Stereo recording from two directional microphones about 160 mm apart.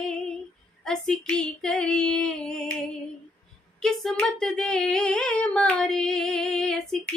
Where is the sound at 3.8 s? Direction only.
5° left (ahead or behind).